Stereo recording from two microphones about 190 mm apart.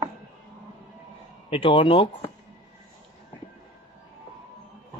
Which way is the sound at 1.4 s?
30° left (ahead or behind).